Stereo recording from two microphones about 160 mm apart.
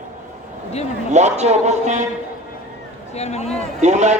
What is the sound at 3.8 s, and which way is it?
Speech, 45° right (ahead or behind).